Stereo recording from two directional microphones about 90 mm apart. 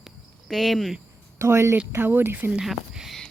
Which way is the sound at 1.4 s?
30° right (ahead or behind).